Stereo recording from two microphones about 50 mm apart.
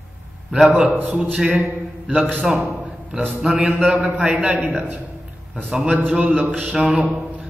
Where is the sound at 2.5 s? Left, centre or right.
Right.